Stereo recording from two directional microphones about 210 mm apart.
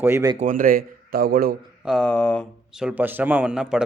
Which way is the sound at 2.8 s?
10° right (ahead or behind).